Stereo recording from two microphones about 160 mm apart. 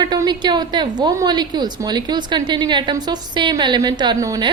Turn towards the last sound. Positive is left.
turn(degrees=-25)  # may be behind; listen again after turning